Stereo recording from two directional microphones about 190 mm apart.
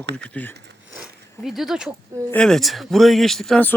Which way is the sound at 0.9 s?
Centre (ahead or behind).